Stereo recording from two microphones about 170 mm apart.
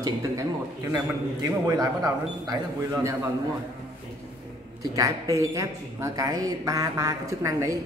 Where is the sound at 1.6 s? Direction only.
20° right (ahead or behind).